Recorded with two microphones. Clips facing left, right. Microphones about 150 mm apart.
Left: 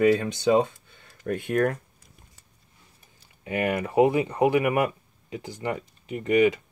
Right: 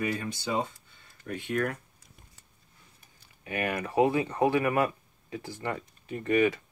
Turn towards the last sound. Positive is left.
turn(degrees=20)  # may be behind; listen again after turning